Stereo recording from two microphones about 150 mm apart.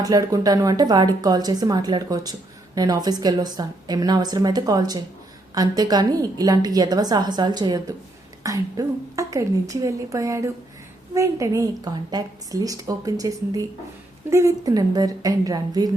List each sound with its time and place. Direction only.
0.0 s a woman's voice: 25° right (ahead or behind)